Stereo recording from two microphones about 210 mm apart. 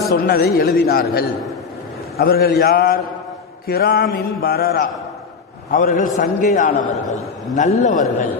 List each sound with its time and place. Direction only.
0.1 s mantra: 50° left (ahead or behind)
2.1 s mantra: 45° left (ahead or behind)
5.7 s a man's voice: 40° left (ahead or behind)